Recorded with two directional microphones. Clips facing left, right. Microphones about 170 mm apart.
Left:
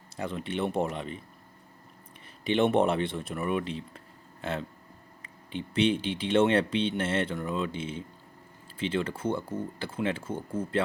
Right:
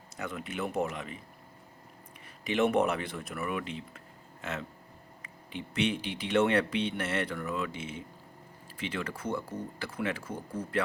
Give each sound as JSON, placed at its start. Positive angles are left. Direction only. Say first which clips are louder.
{"t": 0.2, "sound": "speech", "louder": "left 4 dB", "side_deg": 30}
{"t": 2.4, "sound": "speech", "louder": "left 3 dB", "side_deg": 30}